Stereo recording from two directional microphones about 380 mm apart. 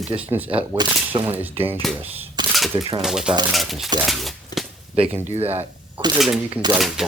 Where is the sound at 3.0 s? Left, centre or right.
Centre.